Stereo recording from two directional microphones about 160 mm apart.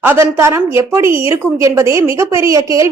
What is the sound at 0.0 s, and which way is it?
A woman's voice, 15° right (ahead or behind).